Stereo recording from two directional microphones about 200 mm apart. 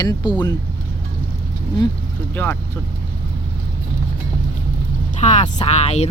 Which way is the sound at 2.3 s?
10° left (ahead or behind).